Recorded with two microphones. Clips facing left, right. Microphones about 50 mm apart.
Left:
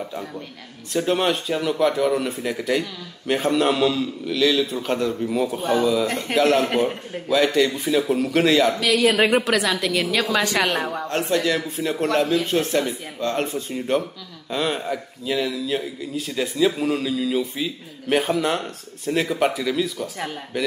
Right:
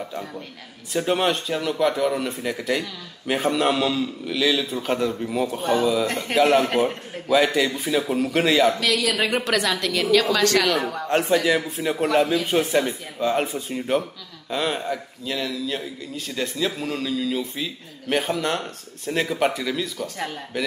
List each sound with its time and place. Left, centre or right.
0.1 s speech: centre
8.9 s speech: left
9.4 s speech: centre
10.3 s a woman's voice: centre
11.1 s speech: centre